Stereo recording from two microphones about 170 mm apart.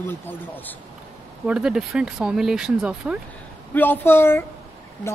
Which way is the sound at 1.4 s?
5° right (ahead or behind).